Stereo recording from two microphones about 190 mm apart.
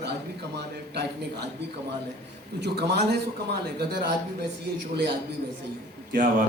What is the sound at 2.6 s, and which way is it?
Speech, 60° right (ahead or behind).